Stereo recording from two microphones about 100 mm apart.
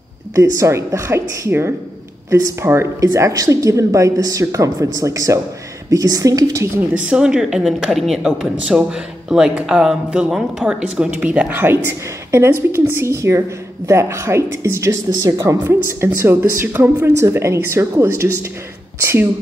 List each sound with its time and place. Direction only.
0.4 s a woman's voice: 30° right (ahead or behind)
6.9 s a woman's voice: 10° right (ahead or behind); by 16.1 s 30° right (ahead or behind)
16.3 s a woman's voice: 15° right (ahead or behind)
17.2 s a woman's voice: 30° right (ahead or behind)